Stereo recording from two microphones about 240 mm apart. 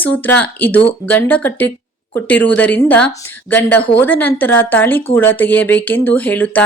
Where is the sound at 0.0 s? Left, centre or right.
Centre.